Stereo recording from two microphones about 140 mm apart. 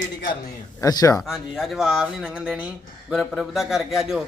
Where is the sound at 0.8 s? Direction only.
25° left (ahead or behind).